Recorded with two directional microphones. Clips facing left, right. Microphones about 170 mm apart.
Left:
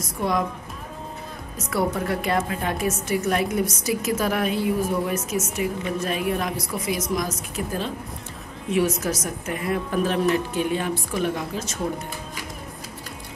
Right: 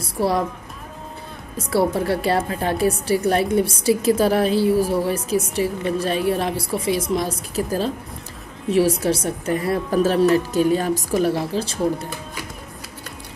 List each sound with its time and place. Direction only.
0.0 s music: 35° right (ahead or behind)
1.6 s a woman's voice: 30° right (ahead or behind)